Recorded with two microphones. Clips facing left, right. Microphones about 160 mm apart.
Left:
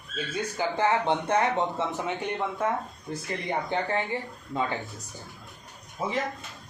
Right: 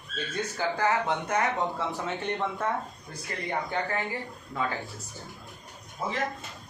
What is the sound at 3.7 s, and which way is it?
Speech, 25° left (ahead or behind).